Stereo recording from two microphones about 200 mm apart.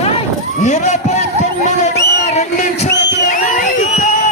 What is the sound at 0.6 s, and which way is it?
Run, 35° left (ahead or behind).